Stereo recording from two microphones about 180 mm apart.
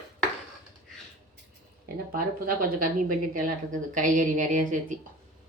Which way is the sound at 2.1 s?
50° right (ahead or behind).